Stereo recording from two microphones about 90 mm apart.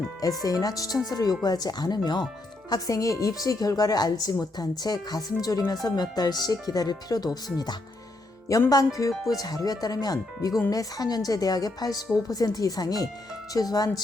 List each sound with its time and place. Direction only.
0.4 s a woman's voice: 45° left (ahead or behind)
2.6 s a woman's voice: 45° left (ahead or behind)